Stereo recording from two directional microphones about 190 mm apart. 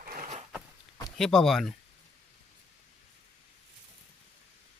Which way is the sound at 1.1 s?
Centre (ahead or behind).